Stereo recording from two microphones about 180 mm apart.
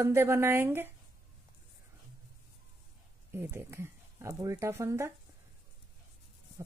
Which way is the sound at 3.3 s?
10° right (ahead or behind).